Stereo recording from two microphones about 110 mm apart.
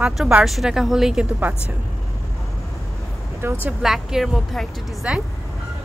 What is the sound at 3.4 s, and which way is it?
Speech, 20° right (ahead or behind).